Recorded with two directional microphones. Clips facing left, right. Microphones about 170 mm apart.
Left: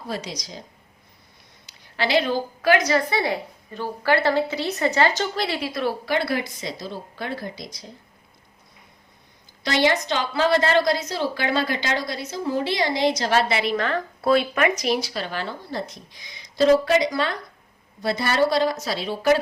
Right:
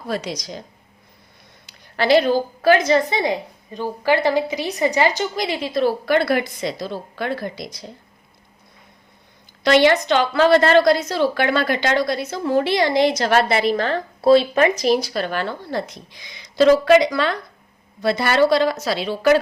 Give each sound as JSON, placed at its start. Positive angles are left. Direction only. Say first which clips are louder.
{"t": 0.1, "sound": "a woman's voice", "louder": "right 6 dB", "side_deg": -65}
{"t": 1.6, "sound": "a woman's voice", "louder": "right 6 dB", "side_deg": -45}
{"t": 6.1, "sound": "a woman's voice", "louder": "right 6 dB", "side_deg": -60}
{"t": 9.6, "sound": "a woman's voice", "louder": "right 6 dB", "side_deg": -65}